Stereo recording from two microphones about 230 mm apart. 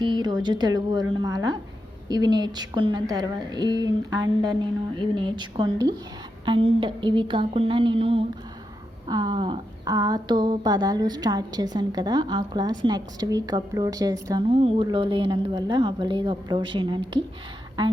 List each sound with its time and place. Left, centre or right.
0.0 s a woman's voice: centre